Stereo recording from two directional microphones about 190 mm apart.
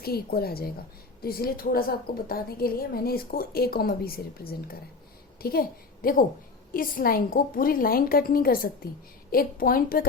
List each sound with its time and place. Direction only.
0.0 s a woman's voice: 55° left (ahead or behind)